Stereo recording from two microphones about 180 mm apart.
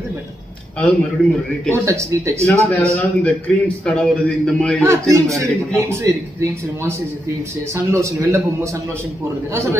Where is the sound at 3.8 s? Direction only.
5° left (ahead or behind).